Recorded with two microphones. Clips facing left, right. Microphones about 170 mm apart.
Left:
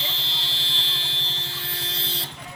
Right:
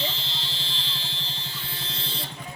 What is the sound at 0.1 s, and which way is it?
Vehicle, 75° left (ahead or behind).